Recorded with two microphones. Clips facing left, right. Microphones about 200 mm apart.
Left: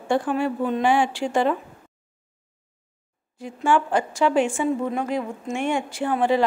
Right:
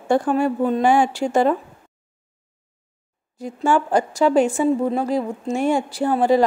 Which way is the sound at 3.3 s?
40° right (ahead or behind).